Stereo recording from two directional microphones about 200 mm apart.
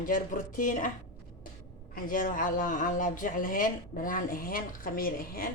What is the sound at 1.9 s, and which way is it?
Speech, 45° left (ahead or behind).